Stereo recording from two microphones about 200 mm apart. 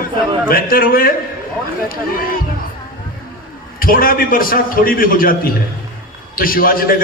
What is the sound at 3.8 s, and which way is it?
A man's voice, 45° left (ahead or behind).